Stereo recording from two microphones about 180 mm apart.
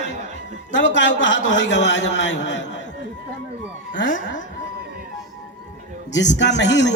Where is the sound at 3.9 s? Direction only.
90° left.